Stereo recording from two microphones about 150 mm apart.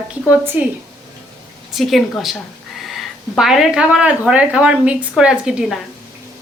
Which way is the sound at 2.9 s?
Centre (ahead or behind).